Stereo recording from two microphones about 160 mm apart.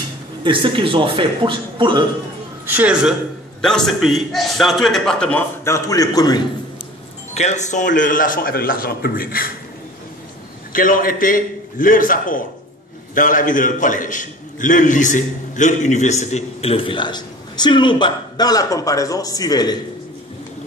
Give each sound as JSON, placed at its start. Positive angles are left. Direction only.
{"t": 0.4, "sound": "a man's voice", "side_deg": -30}
{"t": 2.6, "sound": "a man's voice", "side_deg": -10}
{"t": 7.3, "sound": "a man's voice", "side_deg": 45}
{"t": 10.7, "sound": "a man's voice", "side_deg": 60}